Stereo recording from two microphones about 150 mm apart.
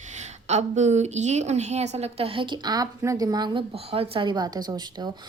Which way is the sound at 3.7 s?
40° right (ahead or behind).